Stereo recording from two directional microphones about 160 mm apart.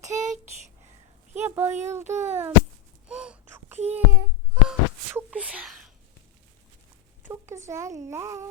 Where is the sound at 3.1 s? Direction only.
5° right (ahead or behind).